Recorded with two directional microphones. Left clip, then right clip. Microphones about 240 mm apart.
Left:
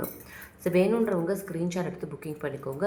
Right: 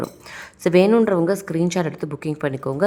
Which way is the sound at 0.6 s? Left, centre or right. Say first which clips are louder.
Right 9 dB; right.